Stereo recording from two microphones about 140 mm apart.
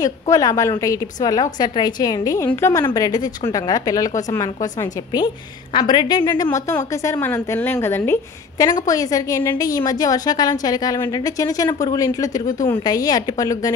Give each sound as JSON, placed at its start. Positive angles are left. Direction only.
{"t": 0.0, "sound": "a woman's voice", "side_deg": 25}
{"t": 5.1, "sound": "a woman's voice", "side_deg": 35}